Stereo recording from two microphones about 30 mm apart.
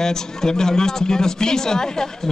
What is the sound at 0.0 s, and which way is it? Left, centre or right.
A man's voice, centre.